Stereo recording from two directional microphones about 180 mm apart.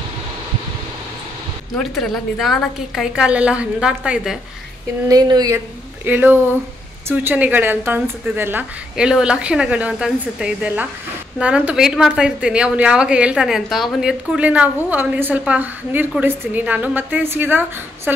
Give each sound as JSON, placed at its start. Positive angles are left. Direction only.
{"t": 1.8, "sound": "a woman's voice", "side_deg": 0}
{"t": 5.0, "sound": "a woman's voice", "side_deg": -20}
{"t": 6.0, "sound": "a woman's voice", "side_deg": -10}